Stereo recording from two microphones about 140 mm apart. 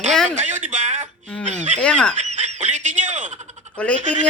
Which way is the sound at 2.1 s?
55° right (ahead or behind).